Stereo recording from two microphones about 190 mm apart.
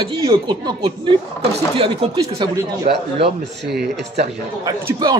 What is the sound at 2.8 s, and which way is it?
Speech, 55° right (ahead or behind).